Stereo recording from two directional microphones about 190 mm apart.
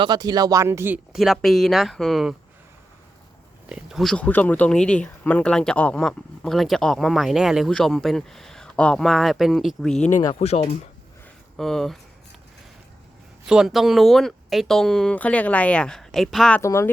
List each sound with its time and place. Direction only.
0.0 s speech: 20° right (ahead or behind); by 2.3 s centre (ahead or behind)
3.7 s speech: centre (ahead or behind)
10.3 s speech: 30° left (ahead or behind)
11.5 s speech: centre (ahead or behind)
13.4 s speech: 5° right (ahead or behind)
16.6 s speech: 15° left (ahead or behind)